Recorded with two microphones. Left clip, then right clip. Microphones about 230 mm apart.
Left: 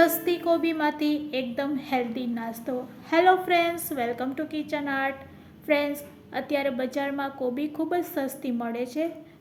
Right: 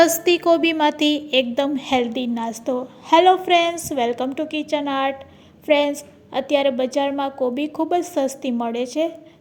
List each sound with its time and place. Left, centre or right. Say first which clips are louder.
0.0 s a woman's voice: right 7 dB; right